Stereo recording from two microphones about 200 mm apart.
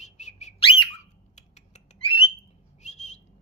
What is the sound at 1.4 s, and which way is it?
Squawk, 35° left (ahead or behind).